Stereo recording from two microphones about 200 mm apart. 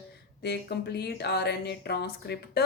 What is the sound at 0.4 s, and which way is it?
Speech, 55° left (ahead or behind).